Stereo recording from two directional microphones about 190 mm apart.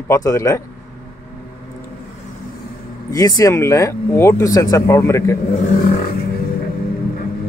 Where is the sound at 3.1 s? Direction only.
20° left (ahead or behind).